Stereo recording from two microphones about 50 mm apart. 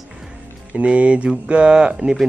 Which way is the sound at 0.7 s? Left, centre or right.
Right.